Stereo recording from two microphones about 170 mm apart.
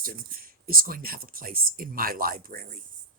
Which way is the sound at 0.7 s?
55° right (ahead or behind).